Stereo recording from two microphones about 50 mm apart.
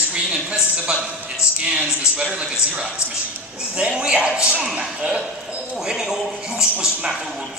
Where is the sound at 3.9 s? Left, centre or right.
Centre.